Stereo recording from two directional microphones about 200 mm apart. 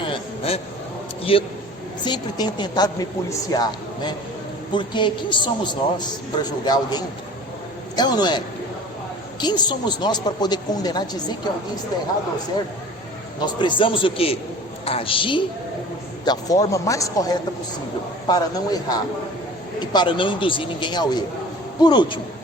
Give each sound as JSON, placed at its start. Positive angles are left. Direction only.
{"t": 0.1, "sound": "a sound", "side_deg": 30}
{"t": 1.2, "sound": "a man's voice", "side_deg": 30}
{"t": 7.9, "sound": "a woman's voice", "side_deg": 20}
{"t": 9.4, "sound": "a woman's voice", "side_deg": 20}
{"t": 13.4, "sound": "a woman's voice", "side_deg": 25}